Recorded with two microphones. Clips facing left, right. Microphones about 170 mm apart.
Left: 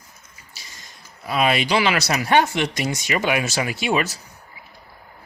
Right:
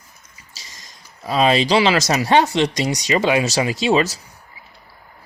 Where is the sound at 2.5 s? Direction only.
15° right (ahead or behind).